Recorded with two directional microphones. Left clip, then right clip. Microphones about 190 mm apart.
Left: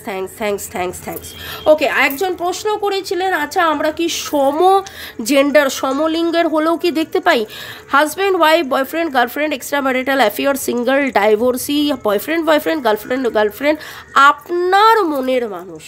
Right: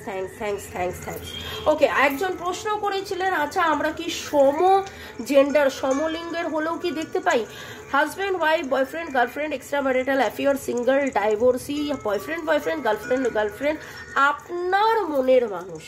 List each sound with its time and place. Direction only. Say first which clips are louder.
0.1 s a woman's voice: left 8 dB; 50° left (ahead or behind)